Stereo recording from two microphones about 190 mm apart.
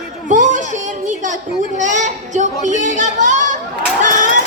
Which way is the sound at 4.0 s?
40° right (ahead or behind).